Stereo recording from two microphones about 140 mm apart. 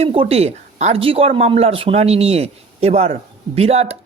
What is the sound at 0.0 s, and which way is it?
Speech, 45° right (ahead or behind).